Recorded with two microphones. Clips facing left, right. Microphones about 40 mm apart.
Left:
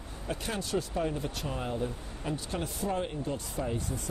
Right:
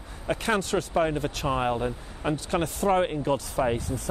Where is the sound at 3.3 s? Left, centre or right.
Right.